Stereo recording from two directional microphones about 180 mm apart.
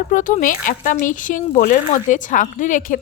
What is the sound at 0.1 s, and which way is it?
Speech, 45° left (ahead or behind).